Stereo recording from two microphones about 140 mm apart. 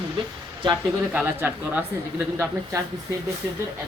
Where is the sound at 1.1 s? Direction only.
10° right (ahead or behind).